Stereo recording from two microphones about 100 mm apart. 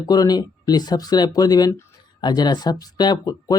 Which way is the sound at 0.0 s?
40° left (ahead or behind).